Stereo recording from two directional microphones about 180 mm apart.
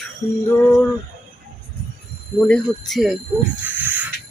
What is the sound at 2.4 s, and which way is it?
Speech, 5° left (ahead or behind).